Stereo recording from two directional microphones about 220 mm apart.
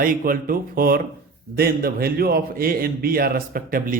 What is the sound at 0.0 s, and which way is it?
A man's voice, 40° right (ahead or behind).